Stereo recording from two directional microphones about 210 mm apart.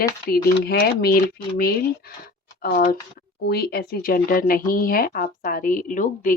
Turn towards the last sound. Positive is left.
turn(degrees=40)  # may be behind; listen again after turning